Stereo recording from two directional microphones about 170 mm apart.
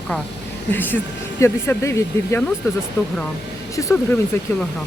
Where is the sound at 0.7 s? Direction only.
10° left (ahead or behind).